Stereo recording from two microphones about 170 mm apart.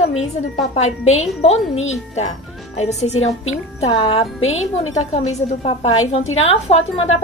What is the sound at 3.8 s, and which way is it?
A woman's voice, 35° left (ahead or behind).